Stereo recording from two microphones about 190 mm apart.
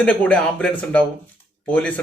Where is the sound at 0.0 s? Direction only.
5° left (ahead or behind).